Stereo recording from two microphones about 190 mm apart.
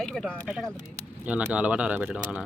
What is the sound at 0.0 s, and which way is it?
Speech, centre (ahead or behind).